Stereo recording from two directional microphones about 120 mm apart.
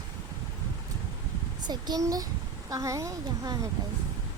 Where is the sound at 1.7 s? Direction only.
35° right (ahead or behind).